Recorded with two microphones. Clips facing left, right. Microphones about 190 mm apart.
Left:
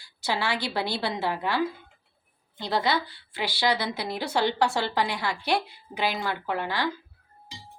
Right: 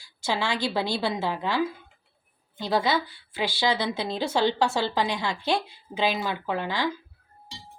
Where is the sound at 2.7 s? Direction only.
15° right (ahead or behind).